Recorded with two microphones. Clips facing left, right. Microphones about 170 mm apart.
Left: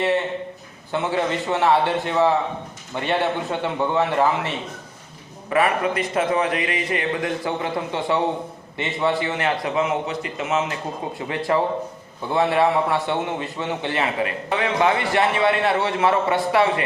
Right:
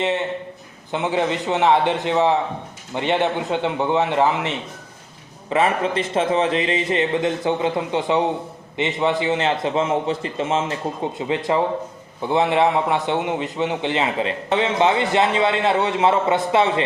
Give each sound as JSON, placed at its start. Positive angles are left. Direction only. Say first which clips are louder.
{"t": 0.9, "sound": "a man's voice", "louder": "right 1 dB", "side_deg": -20}